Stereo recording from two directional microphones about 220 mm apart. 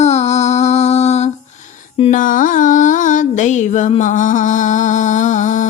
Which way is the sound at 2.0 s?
30° left (ahead or behind).